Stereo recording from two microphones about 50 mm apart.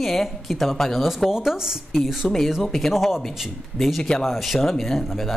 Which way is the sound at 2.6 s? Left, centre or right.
Centre.